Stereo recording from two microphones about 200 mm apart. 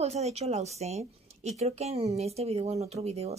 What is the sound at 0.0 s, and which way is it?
Speech, 35° right (ahead or behind).